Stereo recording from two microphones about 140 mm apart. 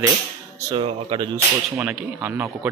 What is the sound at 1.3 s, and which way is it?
Speech, 15° right (ahead or behind).